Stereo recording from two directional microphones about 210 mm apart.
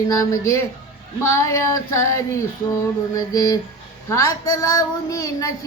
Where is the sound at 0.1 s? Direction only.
15° left (ahead or behind).